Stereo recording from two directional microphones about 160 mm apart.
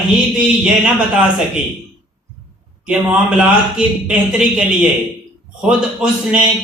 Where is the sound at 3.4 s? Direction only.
5° right (ahead or behind).